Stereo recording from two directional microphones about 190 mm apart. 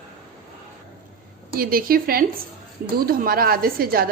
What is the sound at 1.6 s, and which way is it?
A woman's voice, 50° right (ahead or behind).